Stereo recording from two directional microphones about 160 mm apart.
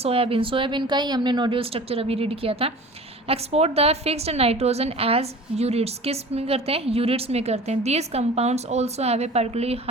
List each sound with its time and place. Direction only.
0.0 s a woman's voice: 35° right (ahead or behind)